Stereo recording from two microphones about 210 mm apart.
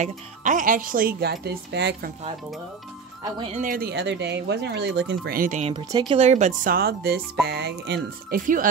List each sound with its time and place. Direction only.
0.0 s speech: 35° right (ahead or behind); by 2.0 s 55° right (ahead or behind)
3.3 s speech: 35° right (ahead or behind); by 6.1 s 20° right (ahead or behind)
6.1 s speech: 30° right (ahead or behind)